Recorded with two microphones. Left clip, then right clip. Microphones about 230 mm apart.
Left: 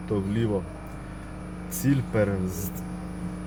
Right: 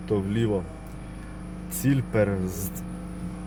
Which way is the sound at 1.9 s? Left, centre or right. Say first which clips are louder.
Right 1 dB; centre.